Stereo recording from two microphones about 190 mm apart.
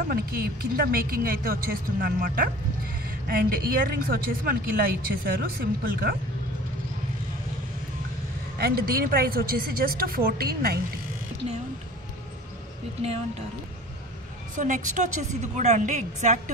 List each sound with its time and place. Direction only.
0.1 s speech: 50° right (ahead or behind)
8.5 s speech: 55° right (ahead or behind)
14.5 s a woman's voice: 40° right (ahead or behind)